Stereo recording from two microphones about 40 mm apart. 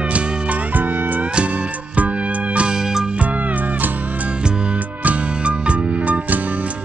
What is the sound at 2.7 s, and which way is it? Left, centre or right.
Music, centre.